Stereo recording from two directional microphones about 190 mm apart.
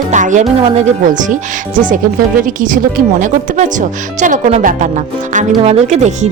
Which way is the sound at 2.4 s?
45° right (ahead or behind).